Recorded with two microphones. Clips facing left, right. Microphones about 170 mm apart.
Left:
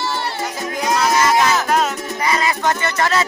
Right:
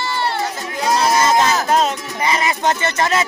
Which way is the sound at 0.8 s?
30° right (ahead or behind).